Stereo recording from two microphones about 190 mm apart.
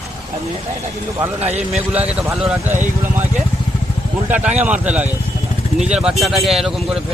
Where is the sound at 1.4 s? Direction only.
35° right (ahead or behind).